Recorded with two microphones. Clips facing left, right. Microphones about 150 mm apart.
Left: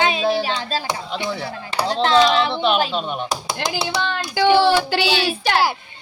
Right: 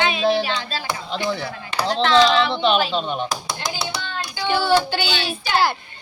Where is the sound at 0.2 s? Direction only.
5° left (ahead or behind).